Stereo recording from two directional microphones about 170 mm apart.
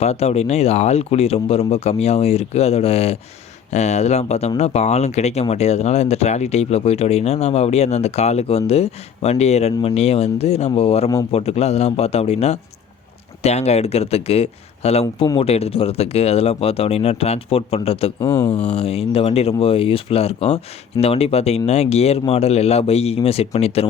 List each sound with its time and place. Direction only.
0.0 s speech: 40° left (ahead or behind)
18.2 s speech: 15° left (ahead or behind)
18.5 s speech: 35° left (ahead or behind)